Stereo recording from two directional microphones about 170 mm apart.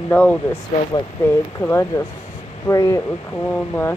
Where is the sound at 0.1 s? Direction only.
10° left (ahead or behind).